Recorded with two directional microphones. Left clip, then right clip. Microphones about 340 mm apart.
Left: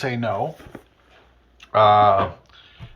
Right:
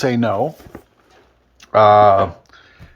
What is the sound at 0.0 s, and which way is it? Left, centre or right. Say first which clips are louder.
Speech: right 6 dB; right.